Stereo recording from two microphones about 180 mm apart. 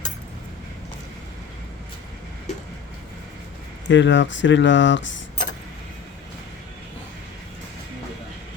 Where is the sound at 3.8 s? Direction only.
90° left.